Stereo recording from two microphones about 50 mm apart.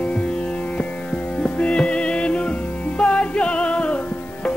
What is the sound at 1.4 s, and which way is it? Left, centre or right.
Music, left.